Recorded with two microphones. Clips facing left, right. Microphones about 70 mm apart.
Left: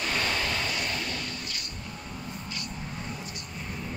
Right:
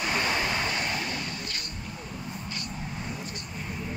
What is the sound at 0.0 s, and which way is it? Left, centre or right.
Vehicle, centre.